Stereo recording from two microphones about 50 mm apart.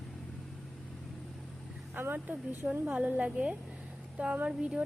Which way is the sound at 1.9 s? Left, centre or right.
Right.